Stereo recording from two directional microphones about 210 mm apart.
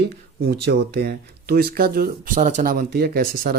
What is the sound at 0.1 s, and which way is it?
Speech, 50° right (ahead or behind).